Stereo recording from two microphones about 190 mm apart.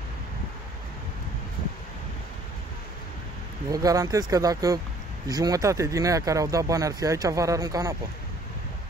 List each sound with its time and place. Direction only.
3.7 s speech: 20° right (ahead or behind)